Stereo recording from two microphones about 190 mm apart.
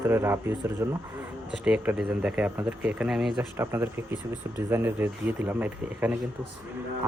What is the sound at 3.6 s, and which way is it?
Speech, 10° right (ahead or behind).